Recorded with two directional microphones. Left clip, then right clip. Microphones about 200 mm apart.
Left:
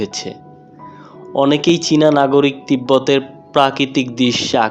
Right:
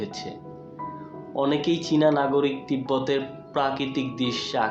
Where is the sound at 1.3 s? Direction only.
45° left (ahead or behind).